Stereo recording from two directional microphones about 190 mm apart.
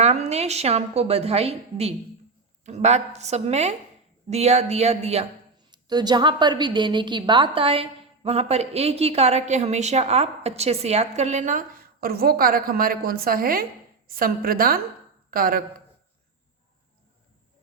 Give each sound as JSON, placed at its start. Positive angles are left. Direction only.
{"t": 0.0, "sound": "a woman's voice", "side_deg": -35}
{"t": 5.7, "sound": "a woman's voice", "side_deg": -20}